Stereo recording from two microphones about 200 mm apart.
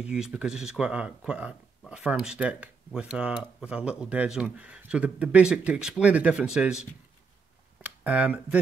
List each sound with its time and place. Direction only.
0.0 s speech: 5° right (ahead or behind)